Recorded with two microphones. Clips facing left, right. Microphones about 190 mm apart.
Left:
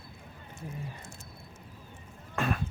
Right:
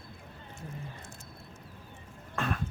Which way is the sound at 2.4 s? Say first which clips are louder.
Left 2 dB; 10° left (ahead or behind).